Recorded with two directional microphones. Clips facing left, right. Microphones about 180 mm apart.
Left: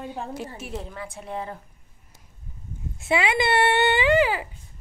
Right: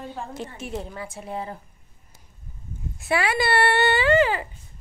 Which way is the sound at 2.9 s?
20° left (ahead or behind).